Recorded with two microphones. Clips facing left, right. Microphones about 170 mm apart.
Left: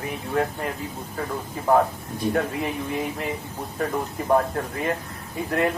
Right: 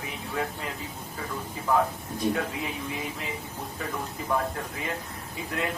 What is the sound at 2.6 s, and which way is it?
Speech, 55° left (ahead or behind).